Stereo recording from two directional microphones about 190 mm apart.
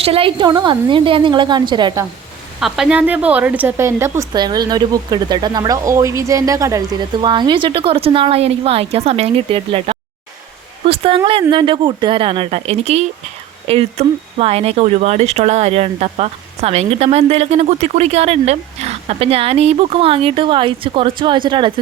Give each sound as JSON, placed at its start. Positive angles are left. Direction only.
{"t": 0.0, "sound": "a woman's voice", "side_deg": -30}
{"t": 2.6, "sound": "a woman's voice", "side_deg": 0}
{"t": 10.8, "sound": "a sound", "side_deg": -30}
{"t": 11.2, "sound": "a woman's voice", "side_deg": -30}